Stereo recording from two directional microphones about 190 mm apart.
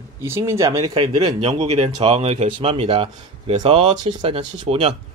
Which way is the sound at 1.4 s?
35° right (ahead or behind).